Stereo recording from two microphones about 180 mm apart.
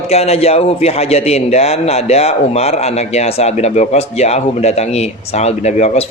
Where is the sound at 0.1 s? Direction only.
35° left (ahead or behind).